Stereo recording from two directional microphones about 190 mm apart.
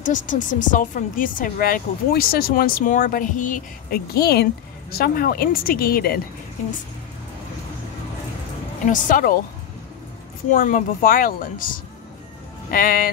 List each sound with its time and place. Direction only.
0.0 s speech: 40° left (ahead or behind)
8.8 s speech: 45° left (ahead or behind)
10.5 s speech: 45° left (ahead or behind)